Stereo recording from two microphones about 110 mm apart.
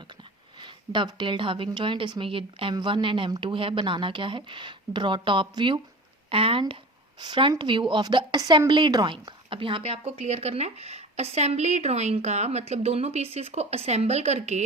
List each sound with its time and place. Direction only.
0.6 s a woman's voice: 45° right (ahead or behind)
6.3 s a woman's voice: 55° right (ahead or behind); by 9.1 s 40° right (ahead or behind)
9.5 s speech: 55° right (ahead or behind); by 14.6 s 90° right